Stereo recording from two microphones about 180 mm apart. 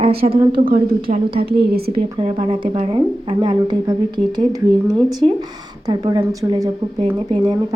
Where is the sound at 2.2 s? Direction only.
30° right (ahead or behind).